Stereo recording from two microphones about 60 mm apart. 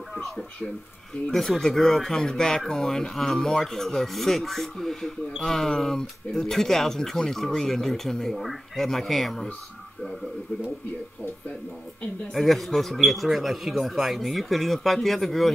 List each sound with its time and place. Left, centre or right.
1.3 s speech: centre
12.4 s speech: centre